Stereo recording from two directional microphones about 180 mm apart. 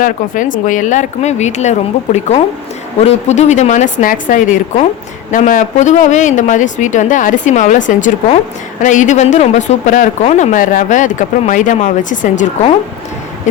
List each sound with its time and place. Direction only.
0.0 s a woman's voice: 45° left (ahead or behind)
3.0 s a woman's voice: 40° left (ahead or behind)